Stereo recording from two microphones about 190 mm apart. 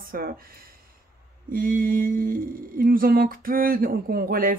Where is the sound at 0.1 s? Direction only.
50° right (ahead or behind).